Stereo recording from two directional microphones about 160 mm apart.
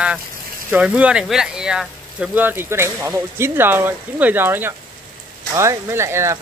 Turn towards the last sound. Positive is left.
turn(degrees=-15)  # may be behind; listen again after turning